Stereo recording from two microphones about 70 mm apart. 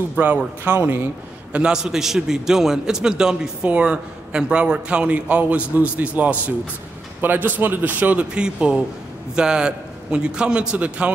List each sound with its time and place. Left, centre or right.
0.1 s speech: centre
0.7 s speech: right
1.5 s a man's voice: centre